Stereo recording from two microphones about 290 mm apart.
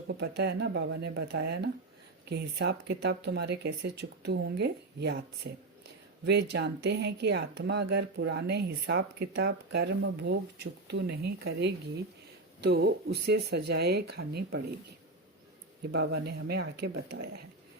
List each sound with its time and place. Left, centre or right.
0.1 s speech: right
12.6 s speech: right
15.9 s speech: right